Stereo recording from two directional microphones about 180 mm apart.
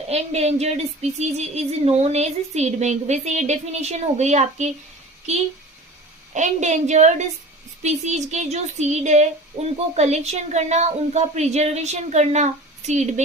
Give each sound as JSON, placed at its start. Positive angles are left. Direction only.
{"t": 0.1, "sound": "speech", "side_deg": -35}